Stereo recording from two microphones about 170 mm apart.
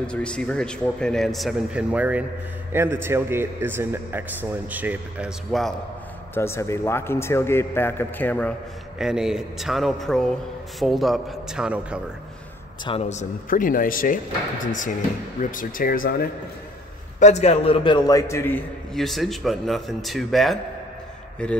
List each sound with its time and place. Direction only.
0.0 s a man's voice: 5° left (ahead or behind); by 5.3 s 10° right (ahead or behind)
5.5 s a man's voice: centre (ahead or behind)
6.3 s a man's voice: 15° left (ahead or behind)
8.9 s a man's voice: 5° right (ahead or behind)
12.8 s speech: 35° left (ahead or behind); by 14.2 s 55° left (ahead or behind)
15.5 s speech: 55° left (ahead or behind)
17.2 s a man's voice: 40° left (ahead or behind); by 18.6 s 15° left (ahead or behind)
18.9 s a man's voice: centre (ahead or behind)